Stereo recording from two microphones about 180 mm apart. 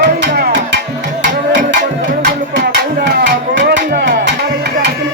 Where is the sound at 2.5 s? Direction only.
75° right (ahead or behind).